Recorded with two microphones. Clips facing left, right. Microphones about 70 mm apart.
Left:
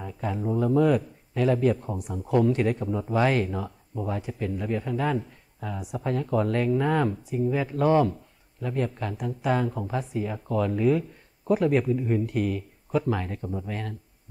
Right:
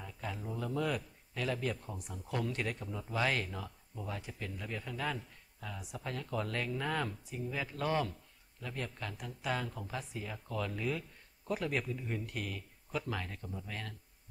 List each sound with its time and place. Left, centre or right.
0.0 s a sound: left
0.6 s speech: left
13.4 s speech: left
13.7 s speech: left